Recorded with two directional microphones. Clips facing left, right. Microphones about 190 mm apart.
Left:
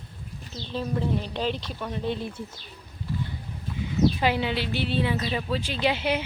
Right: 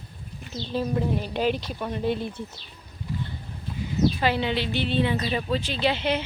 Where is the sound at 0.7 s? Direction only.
10° right (ahead or behind).